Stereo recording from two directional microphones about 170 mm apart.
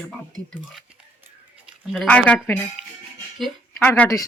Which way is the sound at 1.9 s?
5° left (ahead or behind).